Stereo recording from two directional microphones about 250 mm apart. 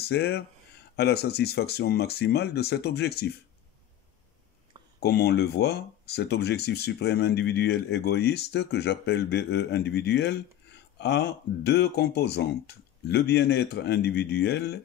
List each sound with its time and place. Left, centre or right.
0.0 s speech: left
5.0 s speech: left